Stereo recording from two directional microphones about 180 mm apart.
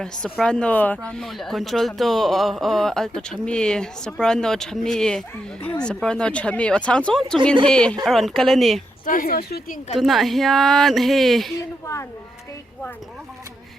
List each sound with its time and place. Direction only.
0.0 s speech: 5° left (ahead or behind)
9.0 s a woman's voice: 50° left (ahead or behind)
9.9 s speech: centre (ahead or behind)